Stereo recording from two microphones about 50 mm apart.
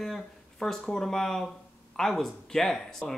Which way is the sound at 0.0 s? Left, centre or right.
Centre.